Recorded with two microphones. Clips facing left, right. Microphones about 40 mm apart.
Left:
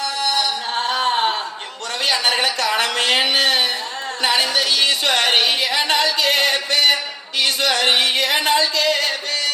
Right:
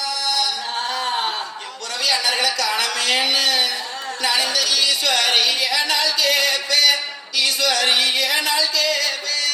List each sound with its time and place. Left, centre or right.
0.0 s music: left
2.0 s a woman's voice: left
4.2 s music: left